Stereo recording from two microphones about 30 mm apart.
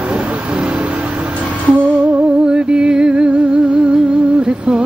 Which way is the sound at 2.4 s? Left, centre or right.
Right.